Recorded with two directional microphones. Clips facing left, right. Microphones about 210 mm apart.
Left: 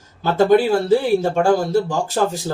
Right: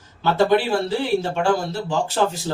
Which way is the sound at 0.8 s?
45° left (ahead or behind).